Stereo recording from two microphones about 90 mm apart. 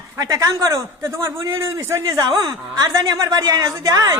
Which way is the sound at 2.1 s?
50° right (ahead or behind).